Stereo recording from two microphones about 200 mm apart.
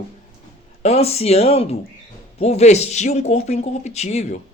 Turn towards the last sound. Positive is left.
turn(degrees=35)  # may be behind; listen again after turning